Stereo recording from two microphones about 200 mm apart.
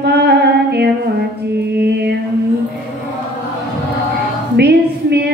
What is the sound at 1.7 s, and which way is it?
Music, 55° right (ahead or behind).